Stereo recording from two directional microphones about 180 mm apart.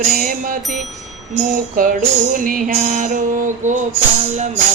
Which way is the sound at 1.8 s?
50° right (ahead or behind).